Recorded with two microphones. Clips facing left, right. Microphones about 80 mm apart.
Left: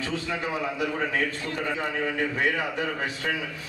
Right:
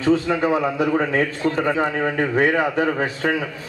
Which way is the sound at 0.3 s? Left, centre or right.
Right.